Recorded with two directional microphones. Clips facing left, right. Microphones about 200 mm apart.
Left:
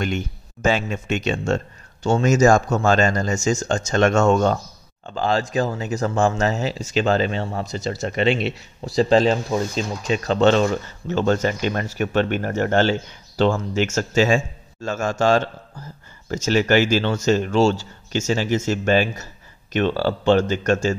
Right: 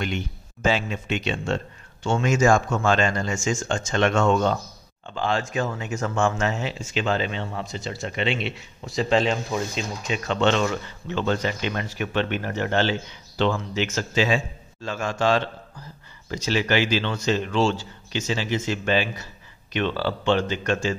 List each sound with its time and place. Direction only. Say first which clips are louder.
0.0 s speech: left 4 dB; 45° left (ahead or behind)